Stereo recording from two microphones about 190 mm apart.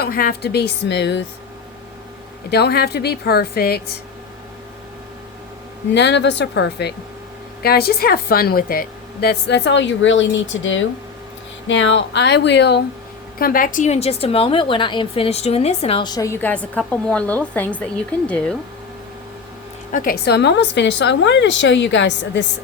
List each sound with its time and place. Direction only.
0.0 s speech: 50° left (ahead or behind)
2.5 s speech: 60° left (ahead or behind)
5.9 s speech: 65° left (ahead or behind)
13.4 s a woman's voice: 45° left (ahead or behind); by 18.5 s 5° left (ahead or behind)
19.9 s speech: 45° left (ahead or behind); by 22.4 s 70° left (ahead or behind)